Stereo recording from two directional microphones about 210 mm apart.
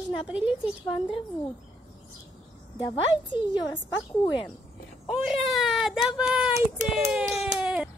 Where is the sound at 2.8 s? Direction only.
20° left (ahead or behind).